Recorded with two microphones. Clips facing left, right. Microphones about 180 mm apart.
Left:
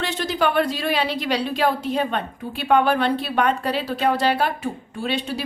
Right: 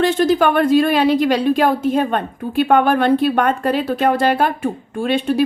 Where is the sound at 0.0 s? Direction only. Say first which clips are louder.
Right 8 dB; 50° right (ahead or behind).